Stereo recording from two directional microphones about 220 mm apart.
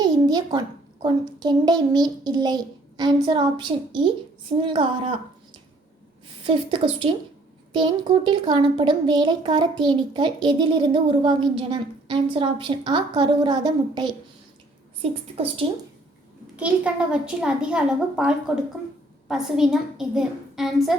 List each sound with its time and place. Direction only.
0.0 s a sound: 20° right (ahead or behind)
1.4 s a woman's voice: 20° right (ahead or behind)
6.4 s a woman's voice: 25° right (ahead or behind)
16.6 s a child's voice: 5° right (ahead or behind)